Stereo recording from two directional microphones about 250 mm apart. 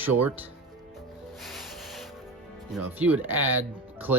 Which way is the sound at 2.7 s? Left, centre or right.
Centre.